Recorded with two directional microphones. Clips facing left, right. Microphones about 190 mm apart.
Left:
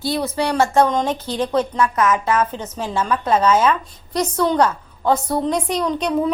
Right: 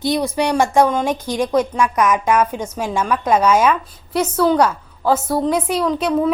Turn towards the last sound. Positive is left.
turn(degrees=-5)  # may be behind; listen again after turning